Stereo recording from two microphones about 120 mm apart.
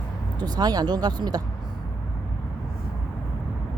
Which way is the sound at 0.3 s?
35° right (ahead or behind).